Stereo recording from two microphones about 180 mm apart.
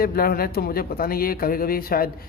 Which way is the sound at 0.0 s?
55° left (ahead or behind).